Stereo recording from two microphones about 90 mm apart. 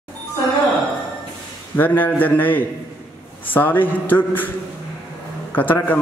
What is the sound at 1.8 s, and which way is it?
A man's voice, 20° left (ahead or behind).